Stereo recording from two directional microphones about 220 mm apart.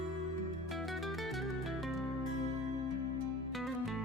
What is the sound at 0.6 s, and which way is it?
Music, centre (ahead or behind).